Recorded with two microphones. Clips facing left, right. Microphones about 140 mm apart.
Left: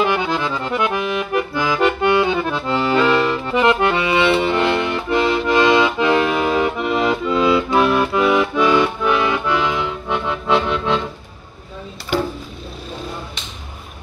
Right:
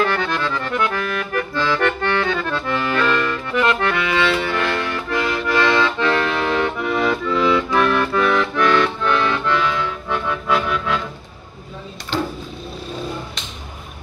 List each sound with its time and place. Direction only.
0.0 s accordion: 15° left (ahead or behind)